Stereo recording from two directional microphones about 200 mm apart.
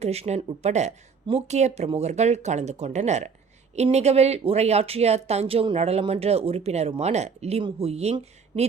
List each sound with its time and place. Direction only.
0.0 s speech: 30° right (ahead or behind)